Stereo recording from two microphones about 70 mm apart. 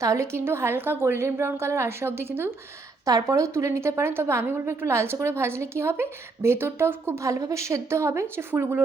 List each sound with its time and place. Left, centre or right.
0.0 s a woman's voice: right
3.1 s a woman's voice: right
7.3 s a woman's voice: right